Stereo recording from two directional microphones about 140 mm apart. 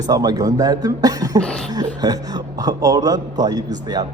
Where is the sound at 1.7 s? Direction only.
25° right (ahead or behind).